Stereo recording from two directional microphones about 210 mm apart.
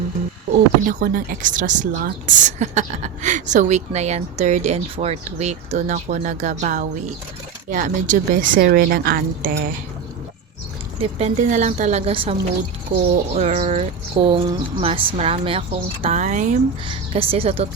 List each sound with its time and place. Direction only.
0.9 s a woman's voice: 40° right (ahead or behind)
11.0 s a woman's voice: 35° right (ahead or behind)
12.9 s a woman's voice: 40° right (ahead or behind)
16.9 s speech: 25° right (ahead or behind)